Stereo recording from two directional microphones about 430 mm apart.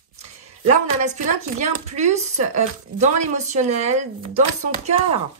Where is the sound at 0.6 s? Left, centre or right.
Centre.